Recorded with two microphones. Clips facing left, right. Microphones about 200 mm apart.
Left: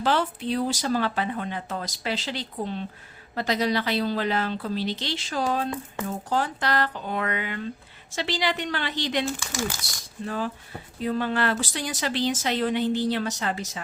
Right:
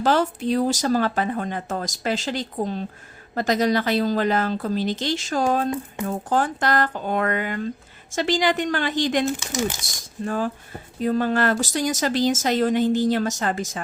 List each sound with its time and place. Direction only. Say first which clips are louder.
0.0 s a woman's voice: right 4 dB; 45° right (ahead or behind)
9.4 s speech: right 5 dB; 20° right (ahead or behind)
9.8 s a woman's voice: right 5 dB; 45° right (ahead or behind)